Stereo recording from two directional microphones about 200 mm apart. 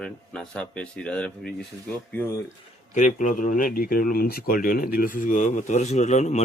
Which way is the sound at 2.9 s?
40° left (ahead or behind).